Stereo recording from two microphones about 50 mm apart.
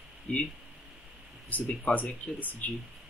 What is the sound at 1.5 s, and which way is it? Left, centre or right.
Speech, left.